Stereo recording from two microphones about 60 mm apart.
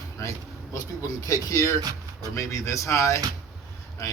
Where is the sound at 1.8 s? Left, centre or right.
Right.